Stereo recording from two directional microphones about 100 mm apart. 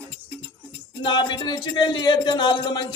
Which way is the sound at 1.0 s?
50° left (ahead or behind).